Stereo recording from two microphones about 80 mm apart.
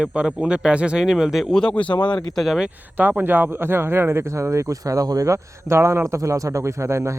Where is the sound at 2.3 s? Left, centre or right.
Centre.